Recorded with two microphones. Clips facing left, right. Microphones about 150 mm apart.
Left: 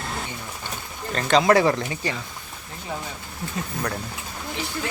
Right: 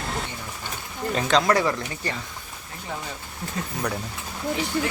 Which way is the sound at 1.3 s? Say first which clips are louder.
Left 4 dB; 15° left (ahead or behind).